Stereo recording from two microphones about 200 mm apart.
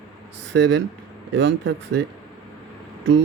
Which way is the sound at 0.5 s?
65° right (ahead or behind).